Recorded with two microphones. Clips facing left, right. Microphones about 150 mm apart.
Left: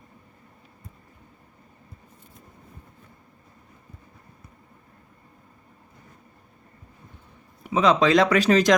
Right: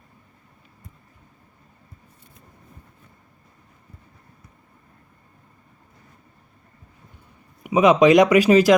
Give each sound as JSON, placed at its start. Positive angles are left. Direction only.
{"t": 7.6, "sound": "speech", "side_deg": -15}